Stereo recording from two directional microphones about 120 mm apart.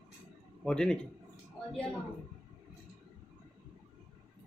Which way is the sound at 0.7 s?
5° left (ahead or behind).